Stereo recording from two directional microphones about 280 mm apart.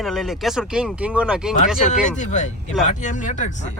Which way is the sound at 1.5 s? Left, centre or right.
Left.